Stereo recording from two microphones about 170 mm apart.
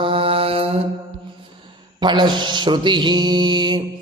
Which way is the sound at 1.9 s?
25° right (ahead or behind).